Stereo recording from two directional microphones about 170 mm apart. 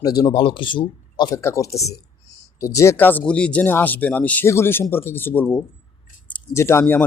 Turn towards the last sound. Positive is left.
turn(degrees=15)  # may be behind; listen again after turning